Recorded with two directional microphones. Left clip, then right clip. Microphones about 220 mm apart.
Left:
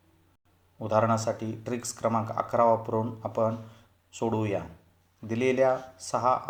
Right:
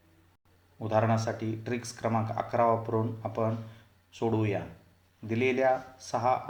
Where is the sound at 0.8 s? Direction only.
25° left (ahead or behind).